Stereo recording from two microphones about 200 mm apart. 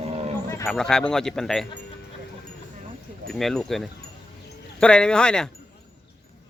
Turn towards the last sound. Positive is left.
turn(degrees=5)  # may be behind; listen again after turning